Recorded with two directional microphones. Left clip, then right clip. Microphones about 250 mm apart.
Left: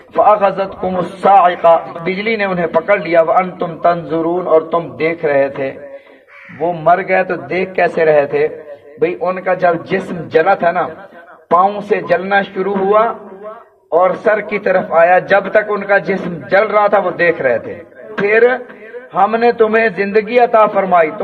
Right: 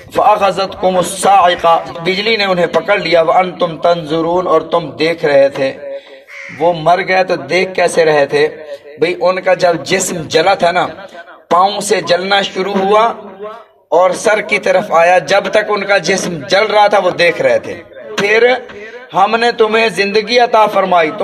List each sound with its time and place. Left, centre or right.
0.1 s a man's voice: centre
6.6 s a man's voice: centre
12.5 s a man's voice: right
13.8 s a man's voice: right